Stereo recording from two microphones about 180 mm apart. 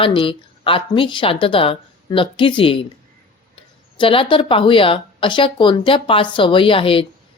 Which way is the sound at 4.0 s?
30° left (ahead or behind).